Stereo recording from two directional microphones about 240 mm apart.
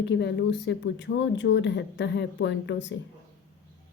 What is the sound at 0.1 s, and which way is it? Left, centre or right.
Speech, left.